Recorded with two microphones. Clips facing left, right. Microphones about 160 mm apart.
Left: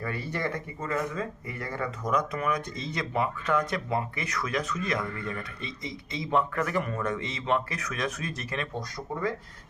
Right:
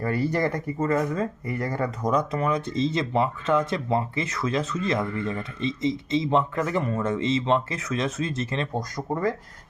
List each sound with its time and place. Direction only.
0.0 s speech: 40° right (ahead or behind)